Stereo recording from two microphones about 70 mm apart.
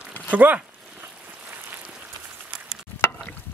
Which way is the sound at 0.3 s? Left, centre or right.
Right.